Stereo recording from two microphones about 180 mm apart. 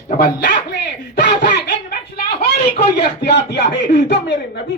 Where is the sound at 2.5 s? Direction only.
65° left (ahead or behind).